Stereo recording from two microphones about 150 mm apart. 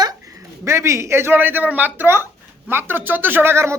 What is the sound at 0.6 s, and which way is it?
Speech, 20° right (ahead or behind).